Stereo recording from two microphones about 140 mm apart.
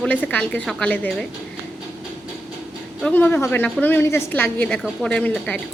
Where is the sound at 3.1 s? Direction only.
15° left (ahead or behind).